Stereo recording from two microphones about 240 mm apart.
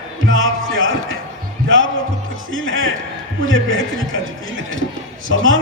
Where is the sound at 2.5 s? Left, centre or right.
Right.